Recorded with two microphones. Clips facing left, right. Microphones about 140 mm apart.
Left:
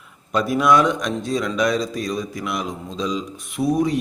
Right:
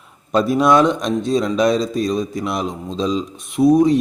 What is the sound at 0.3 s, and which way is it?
A man's voice, 30° right (ahead or behind).